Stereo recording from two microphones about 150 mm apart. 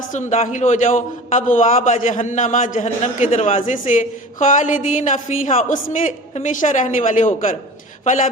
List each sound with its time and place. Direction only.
0.1 s a man's voice: 55° left (ahead or behind)
3.5 s a man's voice: 60° left (ahead or behind)